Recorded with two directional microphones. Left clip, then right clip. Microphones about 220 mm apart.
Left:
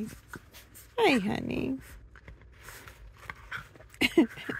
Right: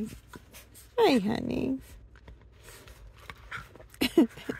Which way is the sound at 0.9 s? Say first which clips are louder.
Right 1 dB; 10° right (ahead or behind).